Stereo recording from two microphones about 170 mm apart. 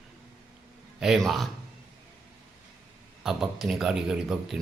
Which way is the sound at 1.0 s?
Centre (ahead or behind).